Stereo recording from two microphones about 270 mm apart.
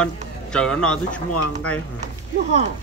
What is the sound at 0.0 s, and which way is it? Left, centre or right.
A man's voice, centre.